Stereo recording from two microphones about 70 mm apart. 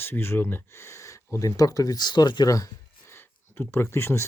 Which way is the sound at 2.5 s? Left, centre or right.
Left.